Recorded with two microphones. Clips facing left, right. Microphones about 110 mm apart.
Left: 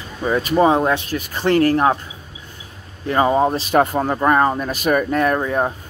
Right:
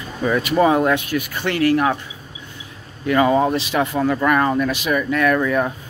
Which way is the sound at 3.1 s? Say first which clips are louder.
Even; 30° left (ahead or behind).